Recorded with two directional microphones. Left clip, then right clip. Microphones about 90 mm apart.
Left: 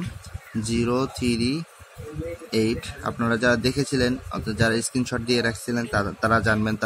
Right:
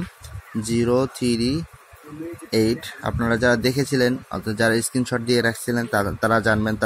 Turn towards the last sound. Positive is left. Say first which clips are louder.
# right 3 dB
turn(degrees=-40)  # may be behind; listen again after turning